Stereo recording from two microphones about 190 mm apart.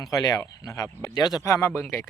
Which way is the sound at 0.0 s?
20° left (ahead or behind).